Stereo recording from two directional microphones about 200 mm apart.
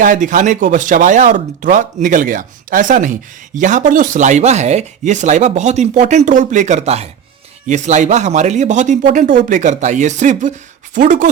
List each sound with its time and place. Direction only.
0.0 s speech: 40° right (ahead or behind)